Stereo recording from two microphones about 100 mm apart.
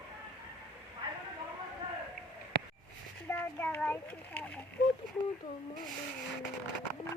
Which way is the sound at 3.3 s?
20° left (ahead or behind).